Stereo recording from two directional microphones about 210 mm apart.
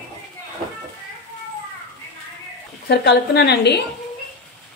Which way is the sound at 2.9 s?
50° left (ahead or behind).